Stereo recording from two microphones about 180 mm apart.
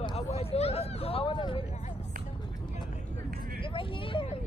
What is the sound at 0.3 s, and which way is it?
Vehicle, 35° left (ahead or behind).